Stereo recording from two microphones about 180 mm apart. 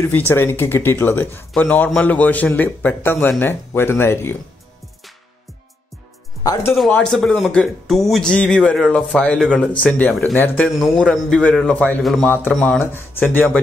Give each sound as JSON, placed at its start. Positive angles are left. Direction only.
{"t": 0.3, "sound": "a man's voice", "side_deg": 10}
{"t": 6.4, "sound": "speech", "side_deg": 20}
{"t": 6.9, "sound": "speech", "side_deg": 5}
{"t": 12.8, "sound": "a man's voice", "side_deg": 10}